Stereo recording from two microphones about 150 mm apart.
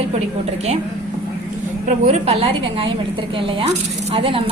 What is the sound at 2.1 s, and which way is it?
A woman's voice, 45° right (ahead or behind).